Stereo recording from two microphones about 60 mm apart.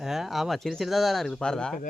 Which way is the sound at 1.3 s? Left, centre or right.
Centre.